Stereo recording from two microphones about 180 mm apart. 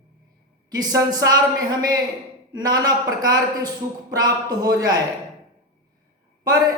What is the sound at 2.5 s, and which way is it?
A woman's voice, 20° right (ahead or behind).